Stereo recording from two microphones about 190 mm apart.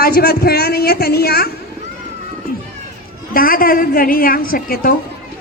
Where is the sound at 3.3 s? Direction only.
50° left (ahead or behind).